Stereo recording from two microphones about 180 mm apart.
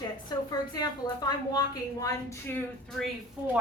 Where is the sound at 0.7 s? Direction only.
20° left (ahead or behind).